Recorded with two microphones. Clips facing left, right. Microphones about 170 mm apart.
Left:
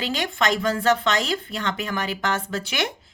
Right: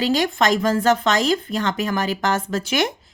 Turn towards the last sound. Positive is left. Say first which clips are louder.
# right 6 dB
turn(degrees=-40)  # may be behind; listen again after turning